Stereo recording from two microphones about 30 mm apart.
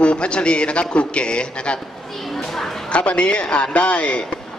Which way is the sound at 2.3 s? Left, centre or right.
Centre.